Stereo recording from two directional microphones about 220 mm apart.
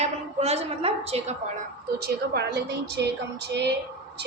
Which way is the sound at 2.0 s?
50° right (ahead or behind).